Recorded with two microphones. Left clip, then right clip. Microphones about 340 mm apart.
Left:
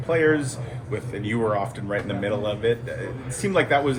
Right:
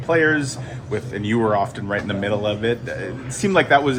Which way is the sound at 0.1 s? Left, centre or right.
Right.